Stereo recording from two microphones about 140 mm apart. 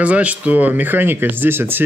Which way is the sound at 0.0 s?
10° right (ahead or behind).